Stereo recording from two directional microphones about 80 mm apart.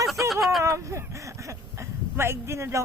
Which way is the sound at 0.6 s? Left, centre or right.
Right.